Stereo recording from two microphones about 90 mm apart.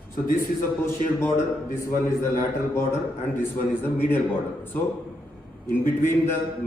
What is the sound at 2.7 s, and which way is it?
A man's voice, 30° left (ahead or behind).